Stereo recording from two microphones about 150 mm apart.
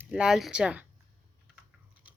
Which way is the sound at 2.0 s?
10° right (ahead or behind).